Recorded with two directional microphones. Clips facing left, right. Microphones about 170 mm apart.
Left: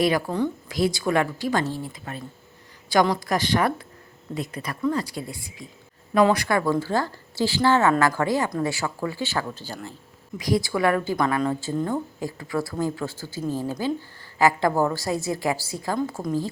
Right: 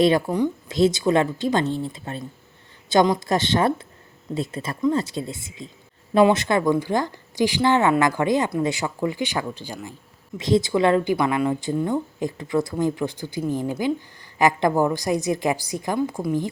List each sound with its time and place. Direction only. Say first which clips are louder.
0.3 s a woman's voice: right 3 dB; 15° right (ahead or behind)
10.3 s a woman's voice: right 4 dB; 25° right (ahead or behind)